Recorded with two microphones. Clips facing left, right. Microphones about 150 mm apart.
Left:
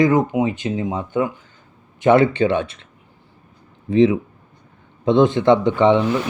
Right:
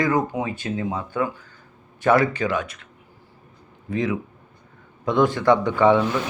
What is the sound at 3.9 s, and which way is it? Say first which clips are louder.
Speech: left 10 dB; 25° left (ahead or behind).